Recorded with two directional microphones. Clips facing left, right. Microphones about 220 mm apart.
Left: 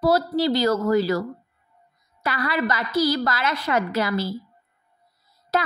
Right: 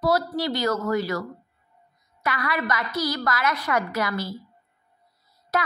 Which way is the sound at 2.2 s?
30° left (ahead or behind).